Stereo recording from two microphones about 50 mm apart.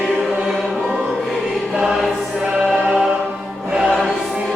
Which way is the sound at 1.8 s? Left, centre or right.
Centre.